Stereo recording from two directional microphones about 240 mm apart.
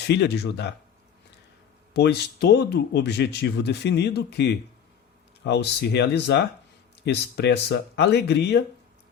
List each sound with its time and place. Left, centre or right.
0.0 s speech: left
1.9 s speech: left